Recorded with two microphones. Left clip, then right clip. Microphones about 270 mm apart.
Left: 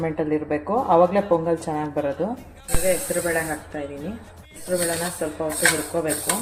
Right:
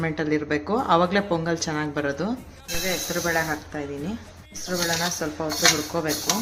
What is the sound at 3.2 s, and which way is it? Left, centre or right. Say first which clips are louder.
Speech: even; right.